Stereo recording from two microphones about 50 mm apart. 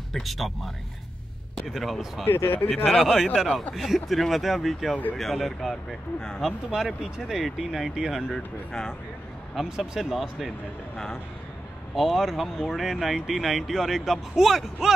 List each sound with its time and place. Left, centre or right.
0.1 s speech: centre
1.7 s speech: centre
2.3 s speech: left
2.7 s speech: centre
9.6 s speech: centre
11.9 s speech: centre